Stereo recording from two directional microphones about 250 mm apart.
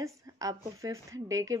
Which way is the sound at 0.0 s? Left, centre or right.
Centre.